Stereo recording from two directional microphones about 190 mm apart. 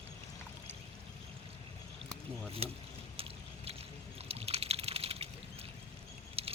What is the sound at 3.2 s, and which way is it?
Boat, 30° right (ahead or behind).